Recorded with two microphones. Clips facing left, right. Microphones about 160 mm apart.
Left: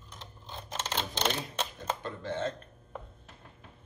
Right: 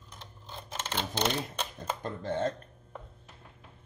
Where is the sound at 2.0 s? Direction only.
45° right (ahead or behind).